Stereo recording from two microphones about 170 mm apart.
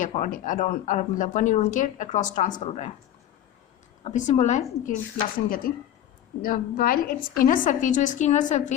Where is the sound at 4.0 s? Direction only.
45° left (ahead or behind).